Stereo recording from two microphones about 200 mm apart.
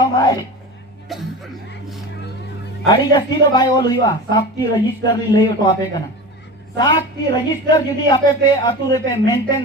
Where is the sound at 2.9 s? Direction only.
20° left (ahead or behind).